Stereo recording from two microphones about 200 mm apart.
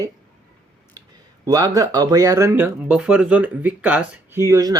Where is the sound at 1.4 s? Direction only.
15° right (ahead or behind).